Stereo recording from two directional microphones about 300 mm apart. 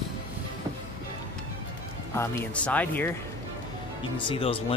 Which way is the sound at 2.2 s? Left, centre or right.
Centre.